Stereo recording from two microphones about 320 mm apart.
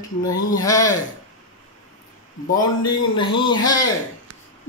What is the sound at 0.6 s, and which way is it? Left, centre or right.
Speech, centre.